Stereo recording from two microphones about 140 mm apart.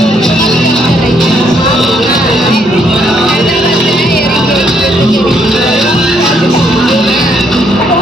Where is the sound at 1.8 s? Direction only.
Centre (ahead or behind).